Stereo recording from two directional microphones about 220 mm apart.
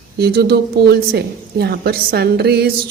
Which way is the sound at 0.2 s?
45° right (ahead or behind).